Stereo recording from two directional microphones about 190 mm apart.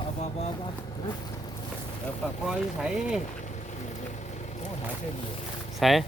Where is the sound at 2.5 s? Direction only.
Centre (ahead or behind).